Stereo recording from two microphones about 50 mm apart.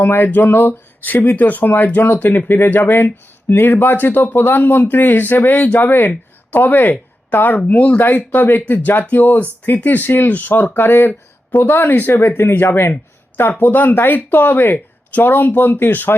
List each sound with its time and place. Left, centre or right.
0.0 s speech: left